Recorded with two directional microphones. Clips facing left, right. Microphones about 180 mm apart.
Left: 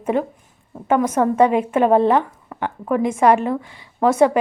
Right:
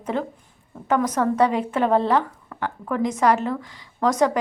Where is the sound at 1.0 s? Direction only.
25° left (ahead or behind).